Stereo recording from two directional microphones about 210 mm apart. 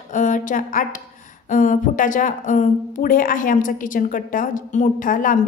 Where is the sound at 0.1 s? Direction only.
35° left (ahead or behind).